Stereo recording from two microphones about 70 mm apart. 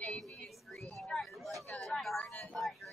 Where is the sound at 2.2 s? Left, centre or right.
Left.